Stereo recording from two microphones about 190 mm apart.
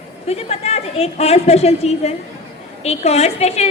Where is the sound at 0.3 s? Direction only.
35° left (ahead or behind).